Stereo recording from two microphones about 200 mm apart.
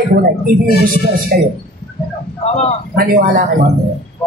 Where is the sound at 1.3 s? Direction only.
50° right (ahead or behind).